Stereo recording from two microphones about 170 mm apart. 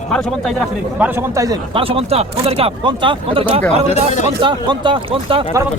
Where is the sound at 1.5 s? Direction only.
30° right (ahead or behind).